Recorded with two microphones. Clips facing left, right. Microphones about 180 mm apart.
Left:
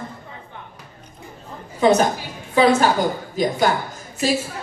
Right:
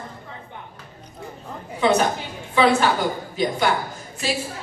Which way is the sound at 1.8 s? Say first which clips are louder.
Left 3 dB; 40° left (ahead or behind).